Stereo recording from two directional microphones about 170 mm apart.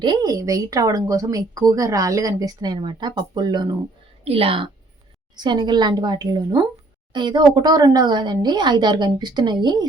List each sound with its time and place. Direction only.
0.0 s a woman's voice: 25° right (ahead or behind)